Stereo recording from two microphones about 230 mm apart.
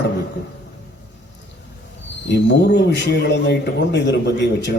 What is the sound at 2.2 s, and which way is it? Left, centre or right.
A man's voice, left.